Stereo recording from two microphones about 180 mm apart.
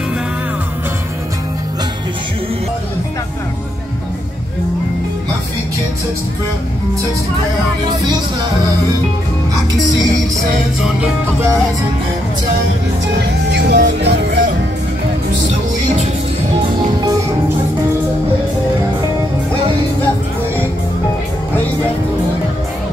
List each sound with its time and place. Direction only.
13.5 s music: 60° right (ahead or behind)
14.0 s speech: 70° right (ahead or behind)